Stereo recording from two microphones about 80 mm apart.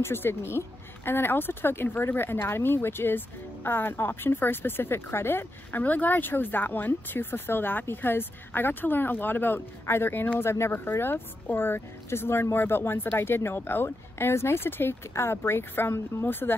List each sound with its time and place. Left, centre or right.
0.0 s speech: left